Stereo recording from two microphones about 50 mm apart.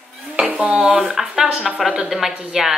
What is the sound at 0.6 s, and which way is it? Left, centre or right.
Speech, centre.